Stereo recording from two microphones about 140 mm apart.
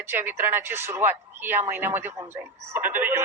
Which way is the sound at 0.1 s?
15° right (ahead or behind).